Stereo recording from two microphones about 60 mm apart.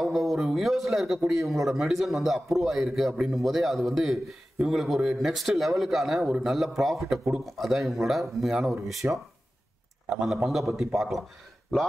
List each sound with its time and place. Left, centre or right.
0.0 s a man's voice: centre
10.0 s a man's voice: centre